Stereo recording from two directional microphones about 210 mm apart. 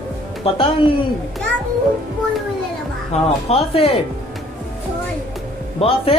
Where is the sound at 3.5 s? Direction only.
30° left (ahead or behind).